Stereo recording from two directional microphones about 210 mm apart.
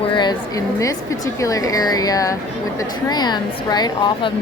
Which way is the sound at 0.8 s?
15° left (ahead or behind).